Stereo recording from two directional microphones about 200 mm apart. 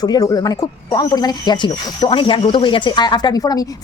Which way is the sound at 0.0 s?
20° left (ahead or behind).